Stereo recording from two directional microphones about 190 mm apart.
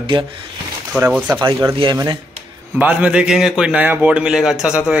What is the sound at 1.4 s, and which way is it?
Speech, 20° right (ahead or behind).